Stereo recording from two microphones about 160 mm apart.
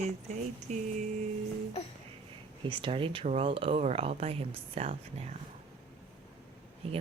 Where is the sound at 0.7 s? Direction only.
50° right (ahead or behind).